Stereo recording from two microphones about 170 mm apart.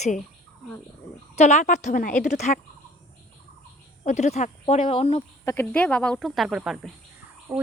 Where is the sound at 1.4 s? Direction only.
45° left (ahead or behind).